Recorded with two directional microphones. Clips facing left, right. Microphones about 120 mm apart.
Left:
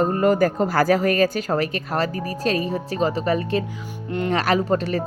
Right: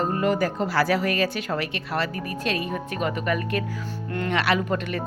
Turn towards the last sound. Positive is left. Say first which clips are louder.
# left 4 dB
turn(degrees=35)  # may be behind; listen again after turning